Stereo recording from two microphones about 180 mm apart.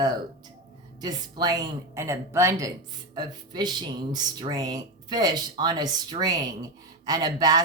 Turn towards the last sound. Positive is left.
turn(degrees=-20)  # may be behind; listen again after turning